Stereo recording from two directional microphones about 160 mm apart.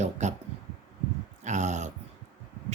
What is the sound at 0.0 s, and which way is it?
Speech, 45° right (ahead or behind).